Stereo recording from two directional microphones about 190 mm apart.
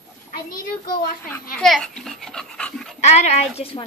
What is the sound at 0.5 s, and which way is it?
Speech, 45° left (ahead or behind).